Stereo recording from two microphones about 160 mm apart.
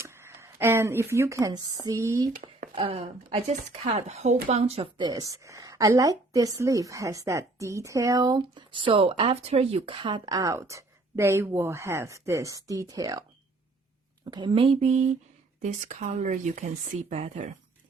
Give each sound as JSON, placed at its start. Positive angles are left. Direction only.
{"t": 0.0, "sound": "speech", "side_deg": -15}
{"t": 2.7, "sound": "speech", "side_deg": -35}
{"t": 5.0, "sound": "a woman's voice", "side_deg": -20}
{"t": 14.3, "sound": "speech", "side_deg": -30}